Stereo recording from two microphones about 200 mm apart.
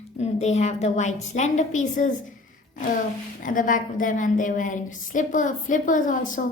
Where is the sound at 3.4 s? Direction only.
40° left (ahead or behind).